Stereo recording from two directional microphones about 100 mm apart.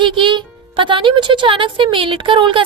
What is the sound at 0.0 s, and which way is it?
Speech, 55° right (ahead or behind).